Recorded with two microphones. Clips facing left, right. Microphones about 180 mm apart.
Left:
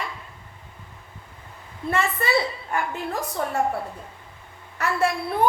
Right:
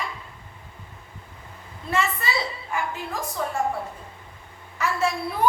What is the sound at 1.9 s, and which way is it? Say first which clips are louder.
Speech: left 3 dB; 55° left (ahead or behind).